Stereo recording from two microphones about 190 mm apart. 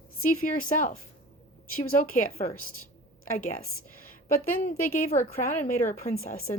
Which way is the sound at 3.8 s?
50° left (ahead or behind).